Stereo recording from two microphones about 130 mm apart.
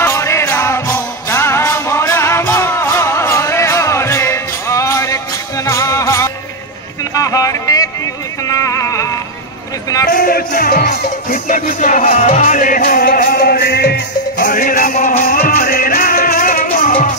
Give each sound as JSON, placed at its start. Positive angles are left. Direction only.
{"t": 0.0, "sound": "music", "side_deg": 20}
{"t": 7.2, "sound": "a sound", "side_deg": 25}
{"t": 10.1, "sound": "music", "side_deg": 90}
{"t": 14.3, "sound": "music", "side_deg": 90}